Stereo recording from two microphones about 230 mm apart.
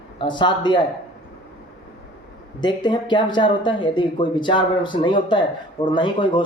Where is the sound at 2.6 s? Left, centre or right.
Centre.